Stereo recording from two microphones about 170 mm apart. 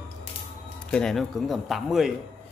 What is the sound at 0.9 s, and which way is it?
Speech, centre (ahead or behind).